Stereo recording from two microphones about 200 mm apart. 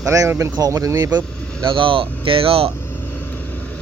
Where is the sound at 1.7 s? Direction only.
25° right (ahead or behind).